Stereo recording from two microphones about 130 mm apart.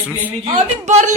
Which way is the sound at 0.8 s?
65° right (ahead or behind).